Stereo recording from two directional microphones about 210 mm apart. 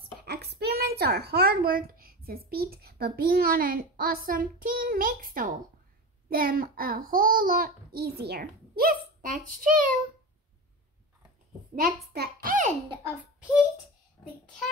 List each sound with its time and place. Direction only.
0.0 s a woman's voice: 45° right (ahead or behind)
12.1 s a child's voice: 45° right (ahead or behind)
13.0 s a child's voice: 5° right (ahead or behind)
14.2 s child singing: 20° left (ahead or behind)